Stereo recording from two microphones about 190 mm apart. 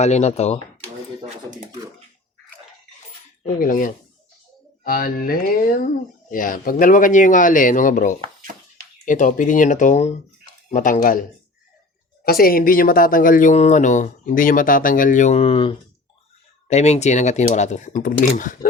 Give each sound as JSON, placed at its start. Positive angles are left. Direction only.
{"t": 0.0, "sound": "speech", "side_deg": 35}
{"t": 3.4, "sound": "speech", "side_deg": 45}
{"t": 12.2, "sound": "speech", "side_deg": 50}